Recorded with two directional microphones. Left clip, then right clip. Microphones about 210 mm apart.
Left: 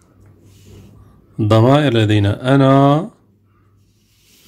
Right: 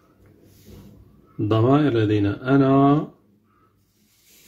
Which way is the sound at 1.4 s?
50° left (ahead or behind).